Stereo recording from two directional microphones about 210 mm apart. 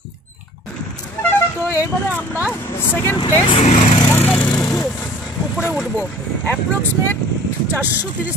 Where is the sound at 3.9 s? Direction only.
15° left (ahead or behind); by 5.9 s 5° right (ahead or behind).